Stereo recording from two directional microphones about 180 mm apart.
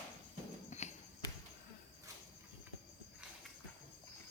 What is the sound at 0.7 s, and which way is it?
Horse, 40° left (ahead or behind).